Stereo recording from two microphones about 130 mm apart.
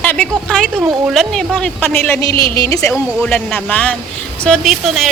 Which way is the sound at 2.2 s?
25° left (ahead or behind).